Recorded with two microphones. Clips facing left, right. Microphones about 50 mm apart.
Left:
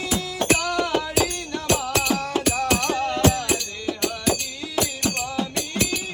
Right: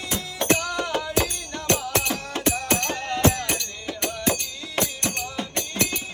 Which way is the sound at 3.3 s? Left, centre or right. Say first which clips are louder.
Left 3 dB; right.